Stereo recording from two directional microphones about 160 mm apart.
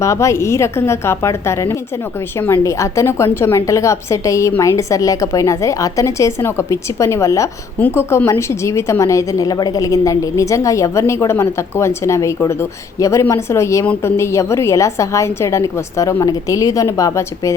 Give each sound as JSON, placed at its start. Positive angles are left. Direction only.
{"t": 0.0, "sound": "a woman's voice", "side_deg": 20}